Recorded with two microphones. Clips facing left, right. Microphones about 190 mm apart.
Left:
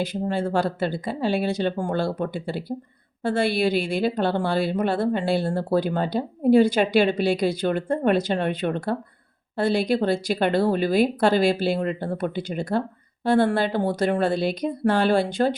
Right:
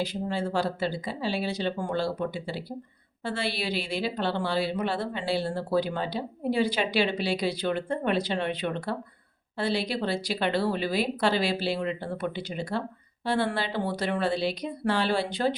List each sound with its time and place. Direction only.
0.0 s a woman's voice: 50° left (ahead or behind)